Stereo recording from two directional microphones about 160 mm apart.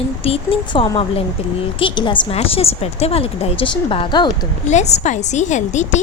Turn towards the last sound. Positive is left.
turn(degrees=50)  # may be behind; listen again after turning